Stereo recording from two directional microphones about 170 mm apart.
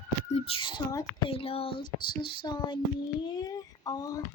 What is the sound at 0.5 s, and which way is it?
Speech, 35° left (ahead or behind).